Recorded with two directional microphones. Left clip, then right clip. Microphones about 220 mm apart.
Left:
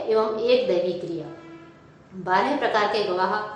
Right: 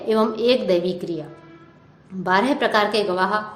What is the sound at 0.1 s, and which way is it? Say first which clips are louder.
Speech: right 2 dB; 50° right (ahead or behind).